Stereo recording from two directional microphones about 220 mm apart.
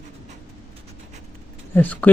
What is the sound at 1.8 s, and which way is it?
Speech, 10° left (ahead or behind).